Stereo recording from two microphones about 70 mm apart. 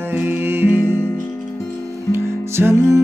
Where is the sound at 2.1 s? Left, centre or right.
Right.